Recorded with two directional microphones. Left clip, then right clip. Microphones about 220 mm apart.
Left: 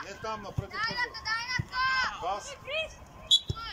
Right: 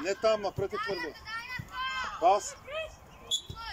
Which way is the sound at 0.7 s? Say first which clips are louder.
Left 3 dB; 40° left (ahead or behind).